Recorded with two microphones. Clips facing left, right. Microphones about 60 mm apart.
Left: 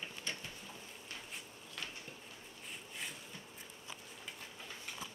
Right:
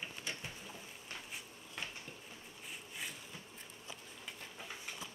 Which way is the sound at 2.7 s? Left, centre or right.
Centre.